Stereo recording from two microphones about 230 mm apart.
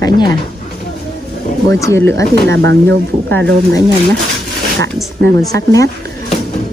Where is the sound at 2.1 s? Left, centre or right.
Right.